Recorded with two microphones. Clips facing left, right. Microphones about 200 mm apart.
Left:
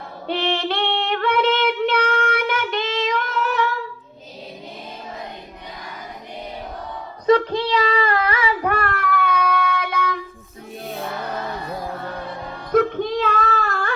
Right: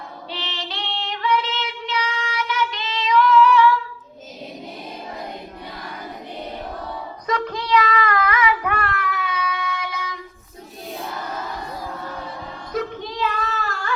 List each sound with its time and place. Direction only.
0.3 s female singing: 55° left (ahead or behind)
7.3 s child singing: 30° left (ahead or behind); by 10.2 s 55° left (ahead or behind)
12.7 s child singing: 55° left (ahead or behind)